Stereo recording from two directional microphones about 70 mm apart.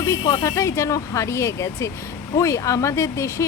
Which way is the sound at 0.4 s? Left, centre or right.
Left.